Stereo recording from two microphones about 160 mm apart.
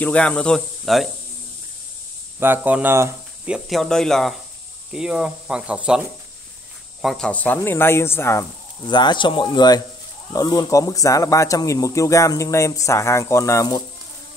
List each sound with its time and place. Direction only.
0.0 s speech: 10° left (ahead or behind)
2.4 s speech: 10° right (ahead or behind); by 8.5 s 15° left (ahead or behind)
8.8 s speech: 30° left (ahead or behind)